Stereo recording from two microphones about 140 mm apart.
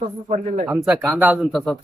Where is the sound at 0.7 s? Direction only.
10° right (ahead or behind).